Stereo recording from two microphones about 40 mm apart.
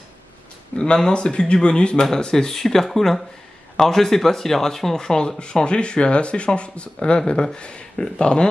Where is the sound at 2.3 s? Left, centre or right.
Centre.